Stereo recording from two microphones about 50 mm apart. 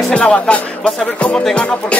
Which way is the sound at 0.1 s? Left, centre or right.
Left.